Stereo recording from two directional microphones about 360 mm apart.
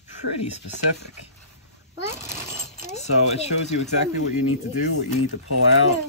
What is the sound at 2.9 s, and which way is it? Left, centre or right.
Speech, centre.